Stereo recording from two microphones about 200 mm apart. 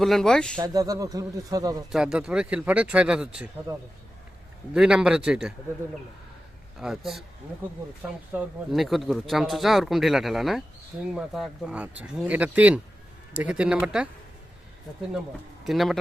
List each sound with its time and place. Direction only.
0.0 s speech: centre (ahead or behind)
0.6 s speech: 20° right (ahead or behind)
1.9 s speech: 5° right (ahead or behind)
6.7 s speech: centre (ahead or behind)
15.6 s speech: centre (ahead or behind)